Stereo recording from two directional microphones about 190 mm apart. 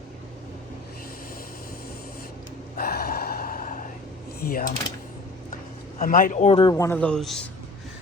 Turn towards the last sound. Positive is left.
turn(degrees=0)  # may be behind; listen again after turning